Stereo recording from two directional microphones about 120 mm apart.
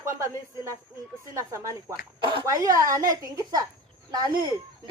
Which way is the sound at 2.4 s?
30° right (ahead or behind).